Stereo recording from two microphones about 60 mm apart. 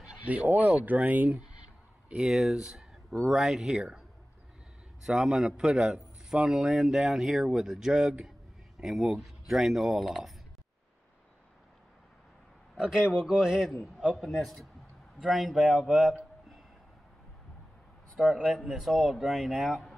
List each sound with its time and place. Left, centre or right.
0.2 s speech: right
2.1 s speech: centre
2.7 s a sound: centre
3.3 s speech: centre
5.0 s speech: centre
12.7 s speech: centre
18.2 s speech: centre